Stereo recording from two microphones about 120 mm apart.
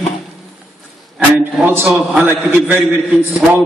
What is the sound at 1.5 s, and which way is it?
A man's voice, 20° right (ahead or behind).